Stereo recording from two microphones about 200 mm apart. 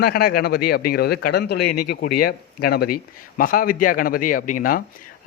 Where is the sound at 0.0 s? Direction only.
50° left (ahead or behind).